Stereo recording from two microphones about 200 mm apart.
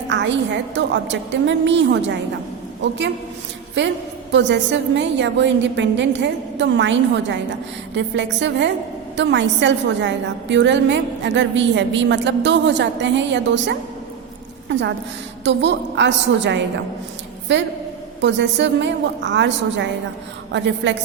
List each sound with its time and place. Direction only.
0.1 s a woman's voice: 65° right (ahead or behind)
4.3 s a woman's voice: 65° right (ahead or behind)